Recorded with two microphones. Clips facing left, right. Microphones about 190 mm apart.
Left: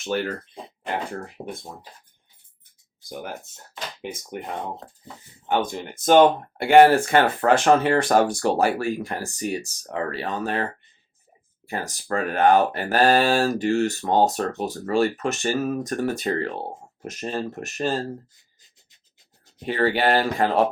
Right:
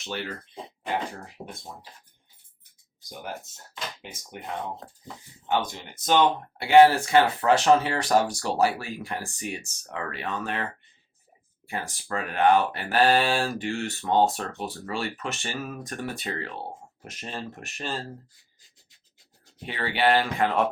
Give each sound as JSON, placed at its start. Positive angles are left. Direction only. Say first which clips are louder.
{"t": 0.0, "sound": "speech", "louder": "left 8 dB", "side_deg": 45}
{"t": 3.0, "sound": "speech", "louder": "left 3 dB", "side_deg": 55}
{"t": 18.3, "sound": "a sound", "louder": "even", "side_deg": 20}
{"t": 19.6, "sound": "speech", "louder": "left 4 dB", "side_deg": 40}